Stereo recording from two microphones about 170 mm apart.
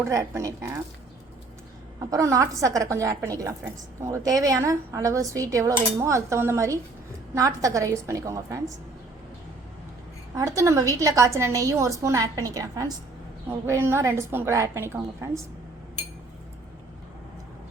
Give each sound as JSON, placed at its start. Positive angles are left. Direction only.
{"t": 0.0, "sound": "a woman's voice", "side_deg": -15}
{"t": 2.0, "sound": "a woman's voice", "side_deg": -20}
{"t": 10.3, "sound": "a woman's voice", "side_deg": -20}